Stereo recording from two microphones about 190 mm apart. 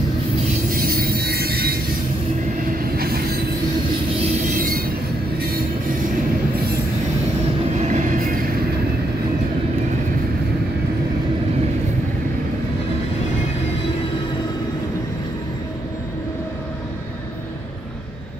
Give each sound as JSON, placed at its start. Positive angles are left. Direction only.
{"t": 0.7, "sound": "music", "side_deg": -50}
{"t": 3.0, "sound": "train", "side_deg": -55}
{"t": 4.5, "sound": "train", "side_deg": -45}
{"t": 7.8, "sound": "train", "side_deg": -40}